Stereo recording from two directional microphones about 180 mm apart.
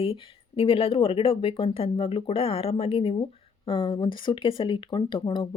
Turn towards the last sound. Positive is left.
turn(degrees=25)  # may be behind; listen again after turning